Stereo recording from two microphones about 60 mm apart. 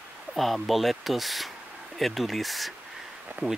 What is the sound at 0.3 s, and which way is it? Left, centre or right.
Speech, centre.